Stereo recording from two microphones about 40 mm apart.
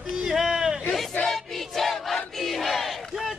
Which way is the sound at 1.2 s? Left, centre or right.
Centre.